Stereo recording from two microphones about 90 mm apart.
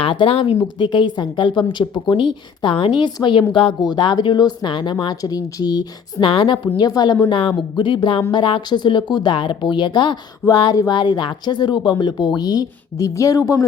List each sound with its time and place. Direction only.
0.0 s speech: 80° left
0.6 s a woman's voice: 55° left (ahead or behind)
3.5 s speech: 75° left (ahead or behind)
3.8 s a woman's voice: 55° left (ahead or behind)
5.2 s speech: 45° left (ahead or behind)
6.2 s a woman's voice: 65° left (ahead or behind)
6.7 s speech: 50° left (ahead or behind)
7.3 s a woman's voice: 70° left (ahead or behind); by 13.7 s 40° left (ahead or behind)